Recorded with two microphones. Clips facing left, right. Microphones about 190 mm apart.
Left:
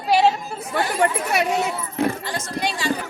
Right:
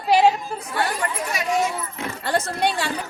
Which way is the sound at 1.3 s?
65° left (ahead or behind).